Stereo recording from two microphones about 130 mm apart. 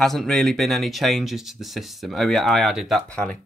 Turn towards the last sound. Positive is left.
turn(degrees=10)  # may be behind; listen again after turning